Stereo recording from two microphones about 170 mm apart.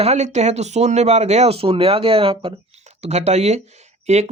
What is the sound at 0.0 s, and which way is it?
Speech, 40° right (ahead or behind).